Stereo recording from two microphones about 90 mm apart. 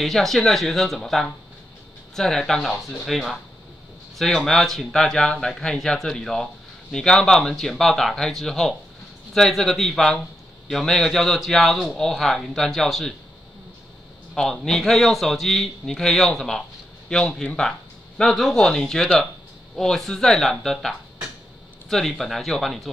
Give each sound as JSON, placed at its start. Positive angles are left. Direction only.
{"t": 0.0, "sound": "speech", "side_deg": 5}
{"t": 14.3, "sound": "speech", "side_deg": 5}